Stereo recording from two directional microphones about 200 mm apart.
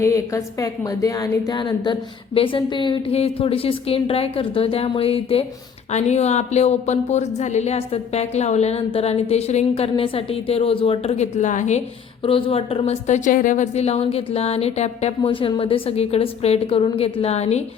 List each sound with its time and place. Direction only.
0.0 s a woman's voice: 15° left (ahead or behind); by 17.6 s 30° left (ahead or behind)